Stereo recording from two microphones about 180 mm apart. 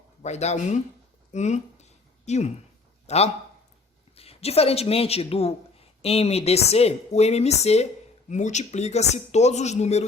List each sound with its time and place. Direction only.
0.2 s speech: 40° left (ahead or behind)
1.3 s a sound: 40° left (ahead or behind)
3.1 s speech: 40° left (ahead or behind)